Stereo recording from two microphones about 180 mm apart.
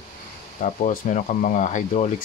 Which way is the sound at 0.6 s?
45° left (ahead or behind).